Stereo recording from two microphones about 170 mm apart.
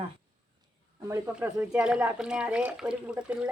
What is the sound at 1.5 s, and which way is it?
Speech, 15° right (ahead or behind).